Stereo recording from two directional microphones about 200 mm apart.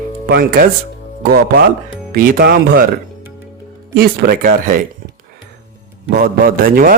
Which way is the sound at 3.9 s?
50° right (ahead or behind).